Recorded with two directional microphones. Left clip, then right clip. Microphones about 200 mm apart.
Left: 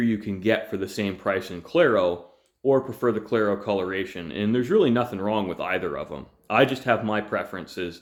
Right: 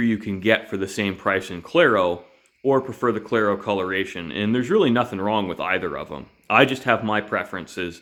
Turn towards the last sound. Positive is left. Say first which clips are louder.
# right 3 dB
turn(degrees=-25)  # may be behind; listen again after turning